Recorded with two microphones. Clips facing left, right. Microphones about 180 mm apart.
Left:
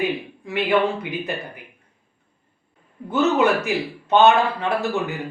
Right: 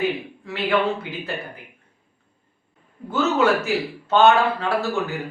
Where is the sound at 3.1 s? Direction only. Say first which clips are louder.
Left 1 dB; 20° left (ahead or behind).